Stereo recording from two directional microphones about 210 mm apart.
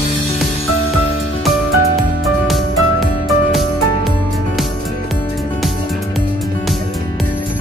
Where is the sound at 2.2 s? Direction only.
Centre (ahead or behind).